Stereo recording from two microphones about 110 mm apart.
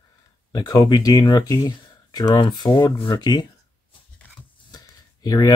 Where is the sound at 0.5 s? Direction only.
35° left (ahead or behind).